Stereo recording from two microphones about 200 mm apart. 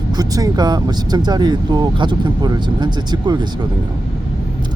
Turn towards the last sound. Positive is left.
turn(degrees=-20)  # may be behind; listen again after turning